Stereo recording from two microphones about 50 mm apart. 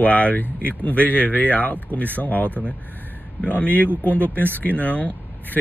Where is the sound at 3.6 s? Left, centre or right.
Left.